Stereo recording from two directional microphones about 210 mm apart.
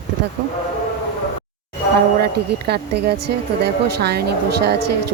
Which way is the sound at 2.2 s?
50° right (ahead or behind).